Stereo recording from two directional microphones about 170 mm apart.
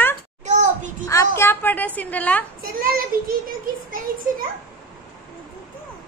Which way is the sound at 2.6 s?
60° right (ahead or behind).